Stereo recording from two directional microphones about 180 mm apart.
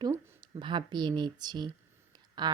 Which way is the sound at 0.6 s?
25° right (ahead or behind).